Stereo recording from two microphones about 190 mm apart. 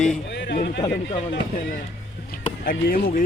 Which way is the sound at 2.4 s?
50° left (ahead or behind).